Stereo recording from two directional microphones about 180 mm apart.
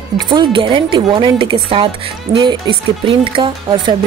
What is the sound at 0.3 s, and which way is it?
Speech, 25° right (ahead or behind).